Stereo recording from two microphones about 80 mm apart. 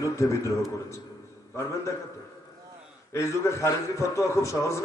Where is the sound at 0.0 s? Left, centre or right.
Left.